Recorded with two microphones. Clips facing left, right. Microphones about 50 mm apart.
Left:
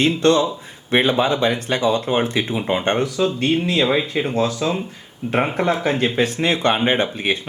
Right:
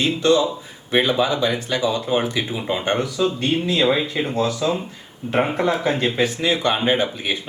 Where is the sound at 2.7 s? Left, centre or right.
Left.